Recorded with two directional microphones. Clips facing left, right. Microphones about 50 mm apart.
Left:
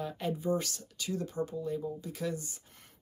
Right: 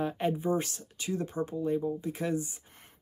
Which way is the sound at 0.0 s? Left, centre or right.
Right.